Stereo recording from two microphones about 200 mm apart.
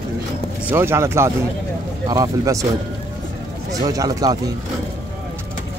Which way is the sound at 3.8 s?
20° right (ahead or behind).